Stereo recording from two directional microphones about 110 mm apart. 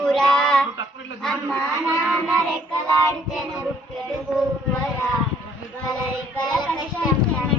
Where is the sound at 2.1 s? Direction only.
5° left (ahead or behind).